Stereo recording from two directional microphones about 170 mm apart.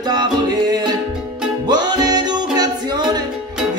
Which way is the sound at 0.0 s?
25° right (ahead or behind).